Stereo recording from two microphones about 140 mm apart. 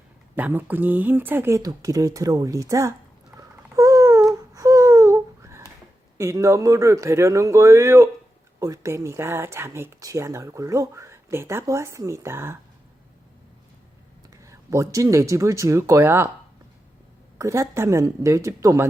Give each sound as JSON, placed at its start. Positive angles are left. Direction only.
{"t": 0.3, "sound": "speech", "side_deg": -10}
{"t": 3.3, "sound": "a sound", "side_deg": -25}
{"t": 6.1, "sound": "speech", "side_deg": -20}
{"t": 14.4, "sound": "speech", "side_deg": -20}
{"t": 17.3, "sound": "speech", "side_deg": -20}